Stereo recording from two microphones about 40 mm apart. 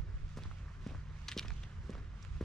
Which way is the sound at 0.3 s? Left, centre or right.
Centre.